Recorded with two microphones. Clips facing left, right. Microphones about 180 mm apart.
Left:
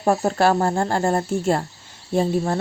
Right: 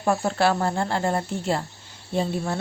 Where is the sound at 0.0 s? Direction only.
40° left (ahead or behind).